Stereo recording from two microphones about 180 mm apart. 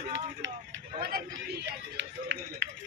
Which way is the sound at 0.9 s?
60° right (ahead or behind).